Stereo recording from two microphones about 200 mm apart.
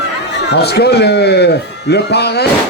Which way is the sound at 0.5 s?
55° left (ahead or behind).